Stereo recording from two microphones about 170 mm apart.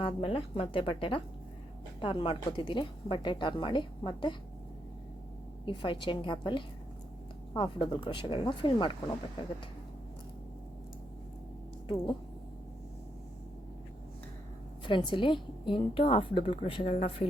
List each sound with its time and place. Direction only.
0.0 s a woman's voice: 35° left (ahead or behind)
5.6 s a woman's voice: 30° left (ahead or behind)
14.8 s a woman's voice: 30° left (ahead or behind)